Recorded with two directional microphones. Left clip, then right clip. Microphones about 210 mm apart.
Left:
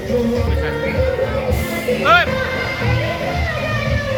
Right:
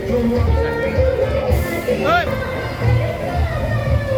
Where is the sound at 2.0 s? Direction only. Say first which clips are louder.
Left 5 dB; 25° left (ahead or behind).